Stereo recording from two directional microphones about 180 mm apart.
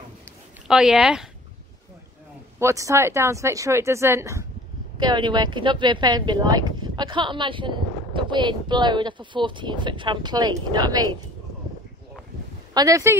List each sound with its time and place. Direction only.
0.7 s speech: 5° right (ahead or behind)
2.6 s speech: 15° right (ahead or behind)
12.7 s speech: 20° right (ahead or behind)